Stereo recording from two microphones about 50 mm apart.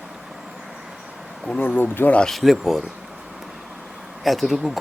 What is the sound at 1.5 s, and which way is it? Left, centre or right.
Speech, left.